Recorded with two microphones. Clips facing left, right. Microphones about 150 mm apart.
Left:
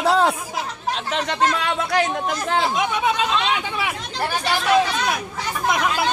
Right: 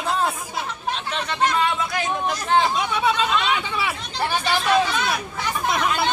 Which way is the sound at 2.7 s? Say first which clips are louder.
Left 1 dB; 15° left (ahead or behind).